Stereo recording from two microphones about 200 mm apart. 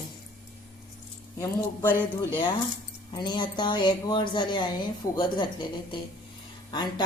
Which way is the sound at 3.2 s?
20° left (ahead or behind).